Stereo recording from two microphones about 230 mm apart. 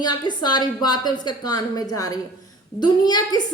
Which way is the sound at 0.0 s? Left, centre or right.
Centre.